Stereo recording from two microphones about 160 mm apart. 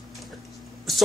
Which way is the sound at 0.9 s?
Centre (ahead or behind).